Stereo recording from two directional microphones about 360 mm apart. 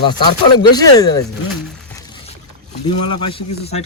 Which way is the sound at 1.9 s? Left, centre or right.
Centre.